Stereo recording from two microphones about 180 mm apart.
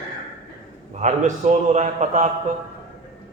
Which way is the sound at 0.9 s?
40° right (ahead or behind).